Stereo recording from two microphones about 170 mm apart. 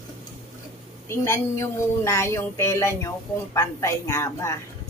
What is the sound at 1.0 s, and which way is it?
A woman's voice, 15° left (ahead or behind).